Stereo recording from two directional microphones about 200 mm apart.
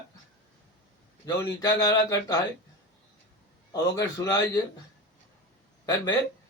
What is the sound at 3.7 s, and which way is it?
Speech, 15° left (ahead or behind).